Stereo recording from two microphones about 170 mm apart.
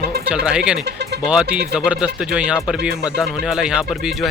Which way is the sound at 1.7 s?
5° right (ahead or behind).